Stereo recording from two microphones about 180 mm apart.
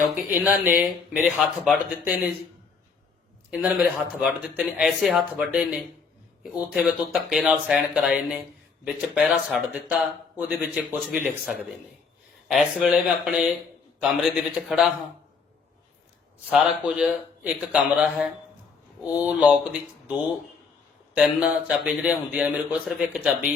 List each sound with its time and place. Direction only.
0.8 s speech: 5° right (ahead or behind)
3.5 s speech: 5° right (ahead or behind)
16.5 s speech: centre (ahead or behind)
21.2 s speech: 5° right (ahead or behind)